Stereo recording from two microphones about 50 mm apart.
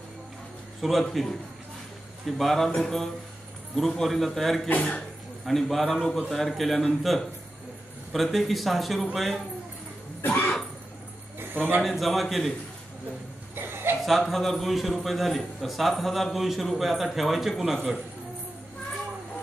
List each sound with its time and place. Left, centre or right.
0.7 s a man's voice: centre
2.2 s a man's voice: centre
4.6 s speech: left
5.4 s a man's voice: centre
10.2 s cough: left
11.5 s a man's voice: right
11.8 s a man's voice: centre
13.6 s chuckle: right
14.0 s a man's voice: centre